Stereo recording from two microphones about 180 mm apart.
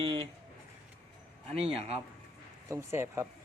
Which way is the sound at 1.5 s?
35° right (ahead or behind).